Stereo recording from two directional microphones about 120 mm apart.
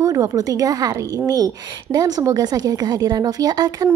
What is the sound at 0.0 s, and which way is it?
Speech, 30° right (ahead or behind).